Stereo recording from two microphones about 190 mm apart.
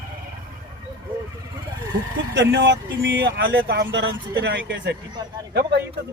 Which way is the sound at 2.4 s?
65° right (ahead or behind).